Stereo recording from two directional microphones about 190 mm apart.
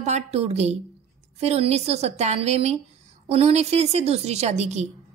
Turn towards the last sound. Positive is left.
turn(degrees=-35)  # may be behind; listen again after turning